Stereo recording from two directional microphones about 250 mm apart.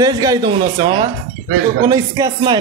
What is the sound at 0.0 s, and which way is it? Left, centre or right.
A man's voice, centre.